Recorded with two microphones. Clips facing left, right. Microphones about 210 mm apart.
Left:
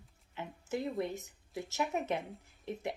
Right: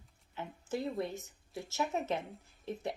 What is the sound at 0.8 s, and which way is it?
Speech, 15° left (ahead or behind).